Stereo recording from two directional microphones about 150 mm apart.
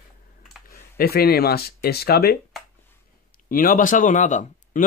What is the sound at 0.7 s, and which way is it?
Speech, 90° left.